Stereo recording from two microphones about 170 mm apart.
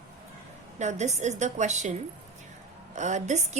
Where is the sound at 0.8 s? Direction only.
40° right (ahead or behind).